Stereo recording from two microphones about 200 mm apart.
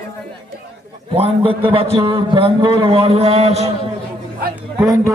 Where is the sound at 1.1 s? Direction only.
25° right (ahead or behind).